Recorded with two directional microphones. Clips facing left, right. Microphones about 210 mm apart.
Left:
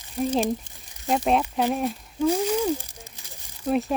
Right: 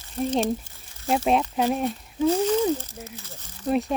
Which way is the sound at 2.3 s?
10° left (ahead or behind).